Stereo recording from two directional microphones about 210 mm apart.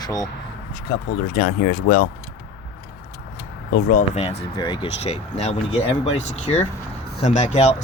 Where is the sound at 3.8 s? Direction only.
35° left (ahead or behind).